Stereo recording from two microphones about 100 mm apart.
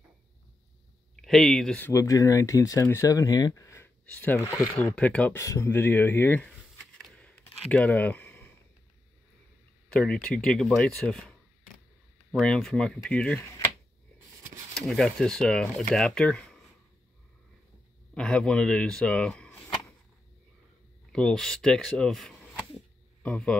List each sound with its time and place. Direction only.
1.1 s speech: 5° left (ahead or behind)
1.8 s speech: 30° left (ahead or behind)
5.4 s speech: 30° left (ahead or behind)
7.0 s a sound: 10° left (ahead or behind)
9.8 s speech: 10° left (ahead or behind)
14.8 s speech: 5° left (ahead or behind)
18.1 s speech: 10° left (ahead or behind)
21.1 s speech: 5° left (ahead or behind)